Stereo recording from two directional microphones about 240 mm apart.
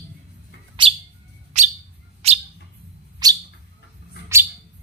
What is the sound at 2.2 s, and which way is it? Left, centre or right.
Bird, right.